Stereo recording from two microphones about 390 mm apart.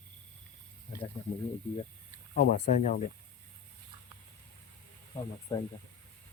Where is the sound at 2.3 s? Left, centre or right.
Left.